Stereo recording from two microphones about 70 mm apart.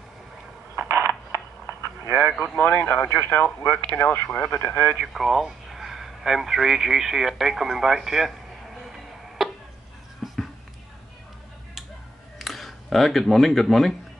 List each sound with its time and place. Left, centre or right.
0.7 s mechanisms: right
2.1 s speech: centre
2.6 s speech: left
4.9 s speech: centre
8.8 s tick-tock: centre
10.2 s a sound: centre
12.4 s speech: centre